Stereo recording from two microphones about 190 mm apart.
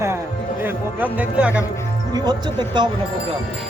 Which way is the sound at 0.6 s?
10° right (ahead or behind).